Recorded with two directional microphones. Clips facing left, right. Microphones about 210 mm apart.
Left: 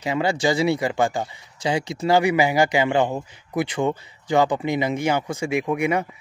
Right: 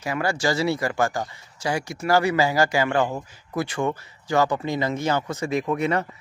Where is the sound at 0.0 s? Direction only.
20° left (ahead or behind).